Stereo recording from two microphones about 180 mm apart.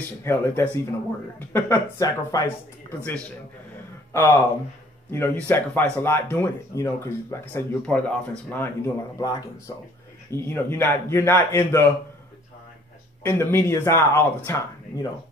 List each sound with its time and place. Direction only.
0.2 s speech: 10° left (ahead or behind)
4.1 s speech: 15° left (ahead or behind)
10.3 s speech: 15° left (ahead or behind)
13.2 s speech: 15° left (ahead or behind)